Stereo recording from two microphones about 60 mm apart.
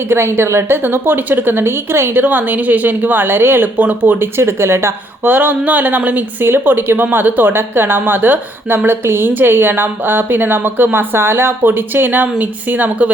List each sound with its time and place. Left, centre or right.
0.1 s speech: right
4.4 s speech: right
5.2 s speech: right